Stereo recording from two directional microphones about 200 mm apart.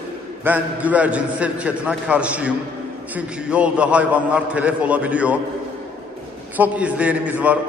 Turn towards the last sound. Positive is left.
turn(degrees=-5)  # may be behind; listen again after turning